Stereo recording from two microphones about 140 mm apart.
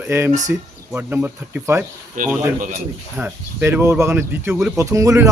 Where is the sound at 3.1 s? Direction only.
10° right (ahead or behind).